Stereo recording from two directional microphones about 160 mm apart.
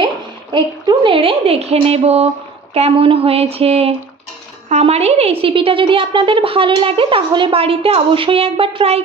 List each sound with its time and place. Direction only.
0.0 s a woman's voice: 30° right (ahead or behind)